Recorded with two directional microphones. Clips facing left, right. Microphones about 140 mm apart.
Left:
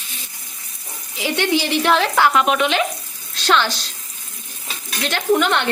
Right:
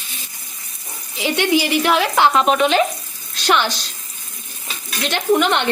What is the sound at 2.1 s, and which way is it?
Speech, 30° right (ahead or behind).